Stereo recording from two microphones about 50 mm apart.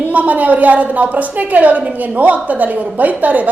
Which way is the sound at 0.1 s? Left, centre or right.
Right.